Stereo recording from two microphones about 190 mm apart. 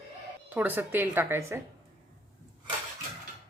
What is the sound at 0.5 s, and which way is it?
Speech, 10° right (ahead or behind).